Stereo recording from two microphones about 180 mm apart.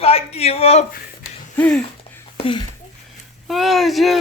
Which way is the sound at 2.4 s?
30° left (ahead or behind).